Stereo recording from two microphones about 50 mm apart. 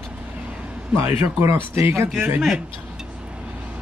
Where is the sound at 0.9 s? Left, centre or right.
Right.